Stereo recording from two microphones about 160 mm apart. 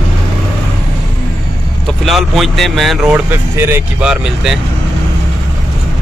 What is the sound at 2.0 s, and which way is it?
Speech, centre (ahead or behind).